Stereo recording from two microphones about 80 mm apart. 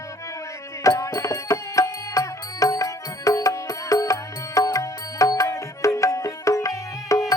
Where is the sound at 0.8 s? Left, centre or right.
Left.